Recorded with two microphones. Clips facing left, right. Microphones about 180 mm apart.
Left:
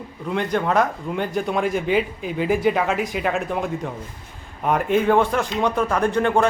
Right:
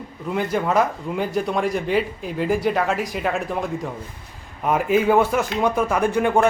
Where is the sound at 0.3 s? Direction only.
5° right (ahead or behind).